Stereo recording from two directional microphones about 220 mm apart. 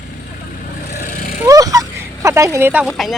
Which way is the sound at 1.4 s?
15° right (ahead or behind).